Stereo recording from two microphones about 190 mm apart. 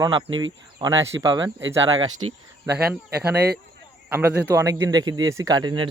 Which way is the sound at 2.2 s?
90° right.